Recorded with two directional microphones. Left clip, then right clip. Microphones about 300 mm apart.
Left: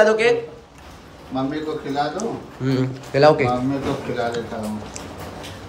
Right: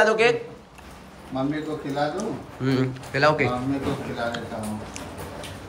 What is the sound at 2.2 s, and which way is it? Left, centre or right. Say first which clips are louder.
Speech: left 3 dB; centre.